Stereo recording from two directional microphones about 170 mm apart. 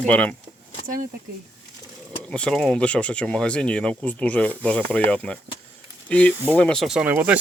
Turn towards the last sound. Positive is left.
turn(degrees=-10)  # may be behind; listen again after turning